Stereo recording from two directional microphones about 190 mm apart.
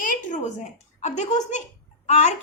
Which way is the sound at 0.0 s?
40° left (ahead or behind).